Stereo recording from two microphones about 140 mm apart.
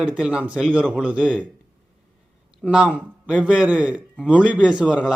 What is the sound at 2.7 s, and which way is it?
A man's voice, 10° right (ahead or behind).